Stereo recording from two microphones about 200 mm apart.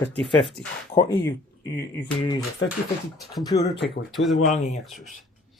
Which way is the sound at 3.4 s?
20° left (ahead or behind).